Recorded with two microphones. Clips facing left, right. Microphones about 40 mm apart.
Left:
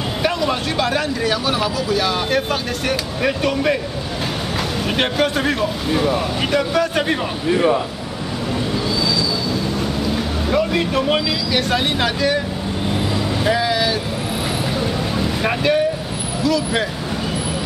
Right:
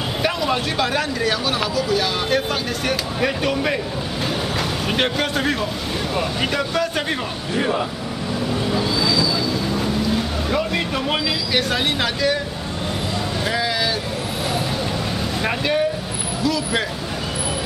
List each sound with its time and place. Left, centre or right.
0.2 s speech: centre
4.8 s speech: centre
9.8 s speech: centre
13.5 s speech: centre
15.4 s speech: centre